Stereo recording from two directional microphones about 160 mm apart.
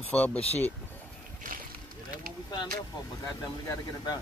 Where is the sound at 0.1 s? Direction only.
10° left (ahead or behind).